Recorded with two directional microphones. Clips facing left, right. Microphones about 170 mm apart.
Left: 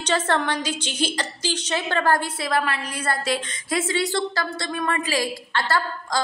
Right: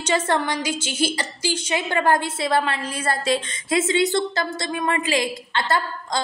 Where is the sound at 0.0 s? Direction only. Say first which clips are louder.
Right 1 dB; 10° right (ahead or behind).